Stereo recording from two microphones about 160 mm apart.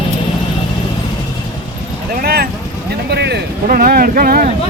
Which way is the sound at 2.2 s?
75° right (ahead or behind).